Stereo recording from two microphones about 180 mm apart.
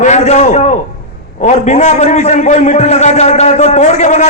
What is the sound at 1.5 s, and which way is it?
A man's voice, 40° left (ahead or behind).